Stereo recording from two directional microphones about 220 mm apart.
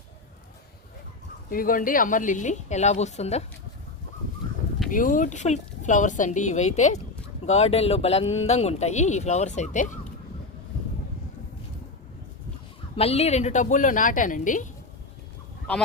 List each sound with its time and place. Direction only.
1.5 s a woman's voice: 40° left (ahead or behind)
4.9 s a woman's voice: 35° left (ahead or behind)
13.0 s a woman's voice: 25° left (ahead or behind)